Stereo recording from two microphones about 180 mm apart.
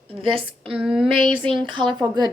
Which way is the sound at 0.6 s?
5° right (ahead or behind).